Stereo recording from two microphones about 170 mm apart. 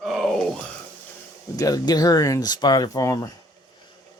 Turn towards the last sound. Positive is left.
turn(degrees=20)  # may be behind; listen again after turning